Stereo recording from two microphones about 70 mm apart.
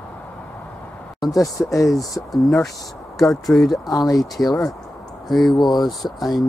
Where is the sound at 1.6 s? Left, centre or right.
Left.